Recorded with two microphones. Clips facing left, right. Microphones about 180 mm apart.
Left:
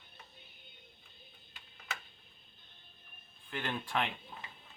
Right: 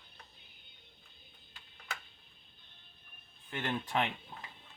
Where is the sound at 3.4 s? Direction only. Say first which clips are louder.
Right 2 dB; 20° right (ahead or behind).